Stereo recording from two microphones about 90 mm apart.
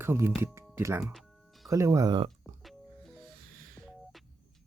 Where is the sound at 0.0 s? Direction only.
25° right (ahead or behind).